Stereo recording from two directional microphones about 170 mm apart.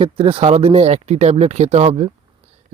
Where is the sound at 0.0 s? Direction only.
35° right (ahead or behind).